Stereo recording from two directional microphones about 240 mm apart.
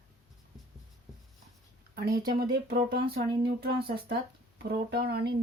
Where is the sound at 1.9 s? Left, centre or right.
Right.